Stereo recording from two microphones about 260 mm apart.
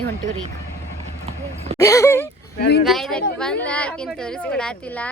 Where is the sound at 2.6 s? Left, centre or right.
Left.